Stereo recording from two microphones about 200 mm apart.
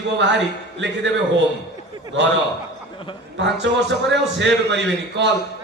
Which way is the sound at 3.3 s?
60° right (ahead or behind).